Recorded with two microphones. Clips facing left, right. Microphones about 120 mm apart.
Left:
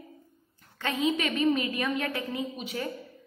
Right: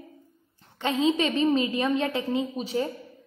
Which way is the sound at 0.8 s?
25° right (ahead or behind).